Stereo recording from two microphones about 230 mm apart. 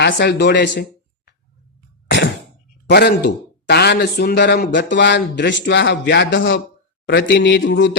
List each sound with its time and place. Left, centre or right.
0.0 s speech: left
2.0 s a sound: left
2.9 s speech: left